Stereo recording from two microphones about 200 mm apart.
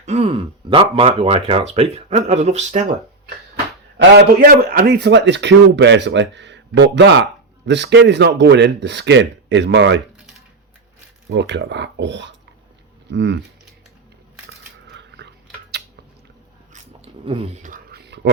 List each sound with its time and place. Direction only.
0.0 s a man's voice: 30° right (ahead or behind)
3.9 s speech: 50° right (ahead or behind)
11.3 s speech: 60° right (ahead or behind)
14.8 s biting: 55° right (ahead or behind)
16.7 s a sound: 30° right (ahead or behind); by 18.3 s 60° right (ahead or behind)